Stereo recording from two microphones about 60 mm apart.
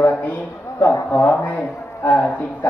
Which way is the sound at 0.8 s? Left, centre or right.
Left.